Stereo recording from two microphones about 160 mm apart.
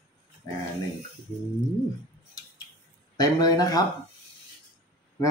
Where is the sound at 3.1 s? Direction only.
25° left (ahead or behind).